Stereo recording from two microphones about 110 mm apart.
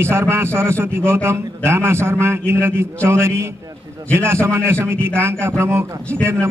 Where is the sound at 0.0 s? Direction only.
25° right (ahead or behind).